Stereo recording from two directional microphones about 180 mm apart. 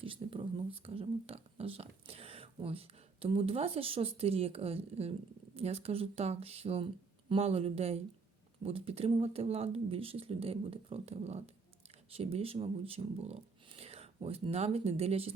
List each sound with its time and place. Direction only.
0.0 s speech: 30° right (ahead or behind)